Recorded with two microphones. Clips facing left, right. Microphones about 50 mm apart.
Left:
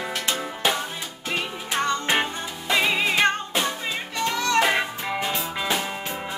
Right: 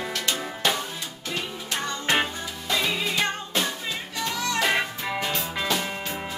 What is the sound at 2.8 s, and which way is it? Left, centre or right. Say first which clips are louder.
Music: left 5 dB; left.